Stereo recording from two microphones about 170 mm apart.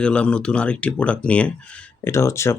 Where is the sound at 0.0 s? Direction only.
5° left (ahead or behind).